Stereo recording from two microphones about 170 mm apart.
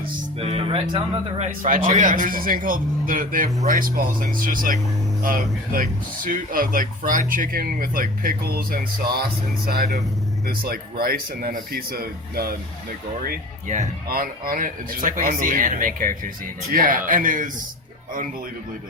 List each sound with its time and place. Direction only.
0.3 s speech: 35° right (ahead or behind)
1.5 s speech: 55° right (ahead or behind)
14.1 s speech: 55° right (ahead or behind)